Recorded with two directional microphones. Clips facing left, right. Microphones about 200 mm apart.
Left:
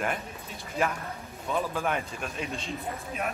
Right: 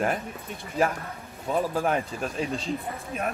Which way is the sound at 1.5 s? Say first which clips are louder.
Right 4 dB; 35° right (ahead or behind).